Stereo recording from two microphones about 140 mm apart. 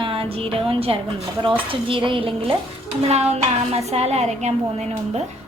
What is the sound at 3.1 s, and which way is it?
A woman's voice, 50° right (ahead or behind).